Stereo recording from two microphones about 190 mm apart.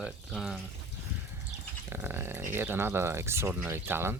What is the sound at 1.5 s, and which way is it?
Goat, 10° right (ahead or behind).